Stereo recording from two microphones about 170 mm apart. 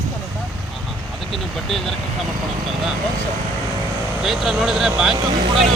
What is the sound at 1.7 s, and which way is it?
Speech, centre (ahead or behind).